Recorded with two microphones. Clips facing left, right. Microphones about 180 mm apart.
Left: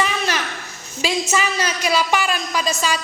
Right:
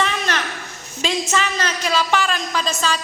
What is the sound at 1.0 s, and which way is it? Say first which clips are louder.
A woman's voice: left 1 dB; 10° left (ahead or behind).